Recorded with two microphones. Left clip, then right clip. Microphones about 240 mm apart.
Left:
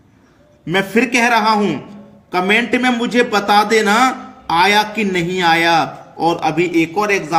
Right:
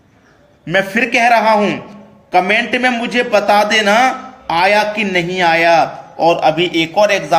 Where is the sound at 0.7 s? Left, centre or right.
Centre.